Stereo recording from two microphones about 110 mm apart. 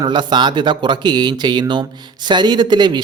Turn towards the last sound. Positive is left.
turn(degrees=-40)  # may be behind; listen again after turning